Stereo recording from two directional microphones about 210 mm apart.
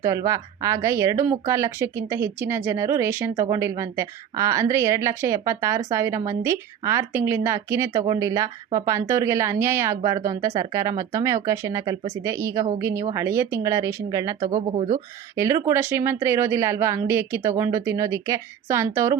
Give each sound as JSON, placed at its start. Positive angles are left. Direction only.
{"t": 0.0, "sound": "speech", "side_deg": -15}
{"t": 14.7, "sound": "speech", "side_deg": -30}
{"t": 15.4, "sound": "speech", "side_deg": -15}